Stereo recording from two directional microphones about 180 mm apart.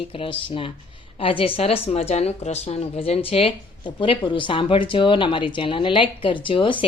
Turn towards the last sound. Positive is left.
turn(degrees=25)  # may be behind; listen again after turning